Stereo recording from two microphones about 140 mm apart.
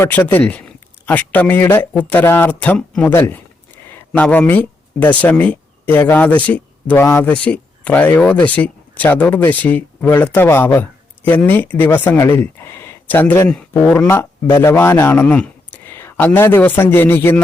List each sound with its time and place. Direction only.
0.0 s speech: 15° left (ahead or behind)
3.1 s speech: 15° left (ahead or behind)
3.8 s a sound: 15° left (ahead or behind)
5.2 s speech: 10° left (ahead or behind)